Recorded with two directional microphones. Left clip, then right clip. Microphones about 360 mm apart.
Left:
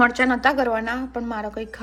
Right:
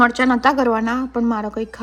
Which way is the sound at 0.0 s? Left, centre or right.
Centre.